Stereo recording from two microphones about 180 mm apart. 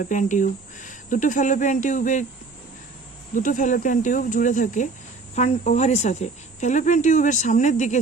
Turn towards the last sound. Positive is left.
turn(degrees=40)  # may be behind; listen again after turning